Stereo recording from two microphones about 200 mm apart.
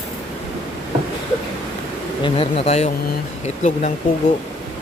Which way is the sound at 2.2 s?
25° left (ahead or behind).